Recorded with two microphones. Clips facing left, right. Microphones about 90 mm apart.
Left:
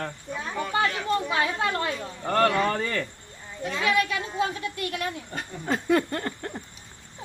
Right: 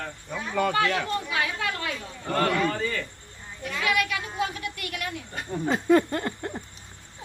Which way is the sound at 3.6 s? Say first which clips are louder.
Left 2 dB; 25° left (ahead or behind).